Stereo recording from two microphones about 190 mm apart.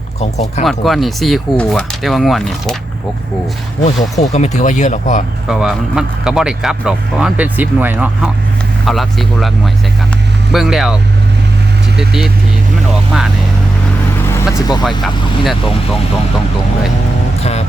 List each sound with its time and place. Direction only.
0.2 s speech: 35° left (ahead or behind)
0.6 s speech: centre (ahead or behind)
3.8 s speech: 35° left (ahead or behind)
5.5 s speech: 5° right (ahead or behind)
10.5 s speech: centre (ahead or behind)
11.9 s speech: 5° right (ahead or behind)
14.3 s speech: 15° left (ahead or behind)
14.8 s speech: centre (ahead or behind)